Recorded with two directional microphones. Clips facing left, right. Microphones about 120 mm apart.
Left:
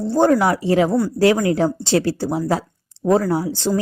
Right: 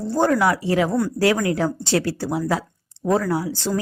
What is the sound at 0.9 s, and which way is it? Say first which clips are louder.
Speech: left 3 dB; 5° left (ahead or behind).